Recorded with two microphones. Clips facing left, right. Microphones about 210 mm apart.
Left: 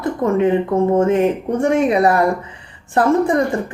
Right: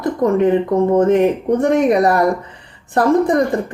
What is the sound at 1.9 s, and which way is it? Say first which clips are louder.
Speech: right 1 dB; 40° right (ahead or behind).